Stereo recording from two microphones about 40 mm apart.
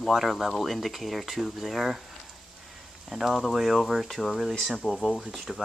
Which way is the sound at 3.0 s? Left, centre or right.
Centre.